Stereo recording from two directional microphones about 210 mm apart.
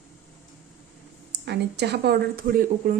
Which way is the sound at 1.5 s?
55° right (ahead or behind).